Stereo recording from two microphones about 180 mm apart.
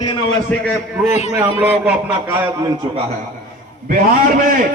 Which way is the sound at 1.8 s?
5° right (ahead or behind).